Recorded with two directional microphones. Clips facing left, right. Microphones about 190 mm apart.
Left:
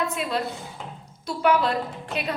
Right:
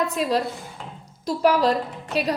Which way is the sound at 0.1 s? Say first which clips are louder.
Right 4 dB; 35° right (ahead or behind).